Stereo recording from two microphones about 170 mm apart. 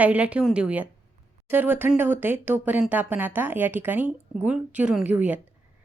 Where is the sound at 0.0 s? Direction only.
10° right (ahead or behind).